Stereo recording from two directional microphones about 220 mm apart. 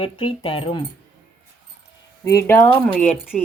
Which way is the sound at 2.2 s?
15° left (ahead or behind).